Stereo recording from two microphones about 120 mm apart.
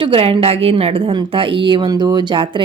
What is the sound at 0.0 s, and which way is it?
A woman's voice, 50° right (ahead or behind).